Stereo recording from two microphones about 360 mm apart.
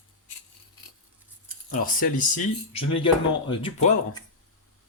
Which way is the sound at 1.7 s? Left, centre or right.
Left.